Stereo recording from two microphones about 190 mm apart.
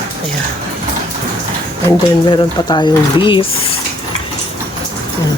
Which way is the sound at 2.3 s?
25° left (ahead or behind).